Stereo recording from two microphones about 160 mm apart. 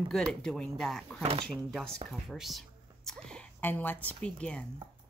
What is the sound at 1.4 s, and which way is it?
A woman's voice, centre (ahead or behind).